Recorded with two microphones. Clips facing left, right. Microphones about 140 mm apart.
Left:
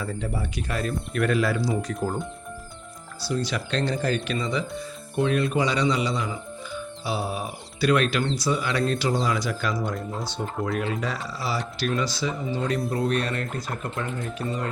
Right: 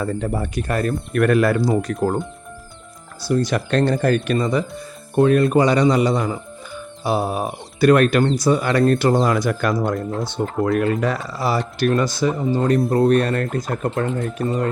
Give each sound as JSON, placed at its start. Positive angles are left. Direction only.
{"t": 0.0, "sound": "speech", "side_deg": -50}
{"t": 3.2, "sound": "speech", "side_deg": -50}